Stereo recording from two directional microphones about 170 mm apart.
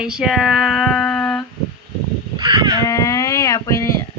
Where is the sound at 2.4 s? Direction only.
25° right (ahead or behind).